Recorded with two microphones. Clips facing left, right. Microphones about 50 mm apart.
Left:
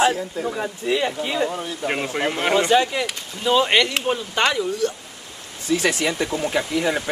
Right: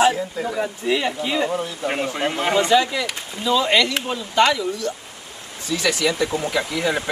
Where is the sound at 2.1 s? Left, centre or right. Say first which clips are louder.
Left 1 dB; left.